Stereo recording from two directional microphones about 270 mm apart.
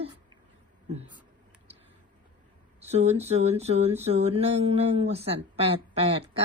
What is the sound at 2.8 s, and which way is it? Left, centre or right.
Speech, right.